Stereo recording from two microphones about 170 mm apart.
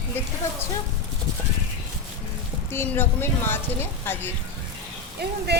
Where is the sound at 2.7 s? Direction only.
15° left (ahead or behind).